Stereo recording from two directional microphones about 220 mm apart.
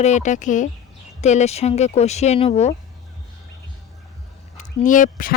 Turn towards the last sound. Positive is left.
turn(degrees=40)  # may be behind; listen again after turning